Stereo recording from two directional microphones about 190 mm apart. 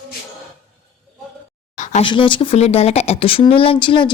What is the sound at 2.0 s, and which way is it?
Speech, 25° left (ahead or behind).